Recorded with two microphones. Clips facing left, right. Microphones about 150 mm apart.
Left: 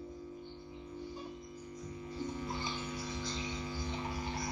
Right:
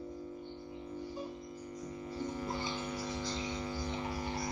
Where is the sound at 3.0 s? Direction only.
40° right (ahead or behind).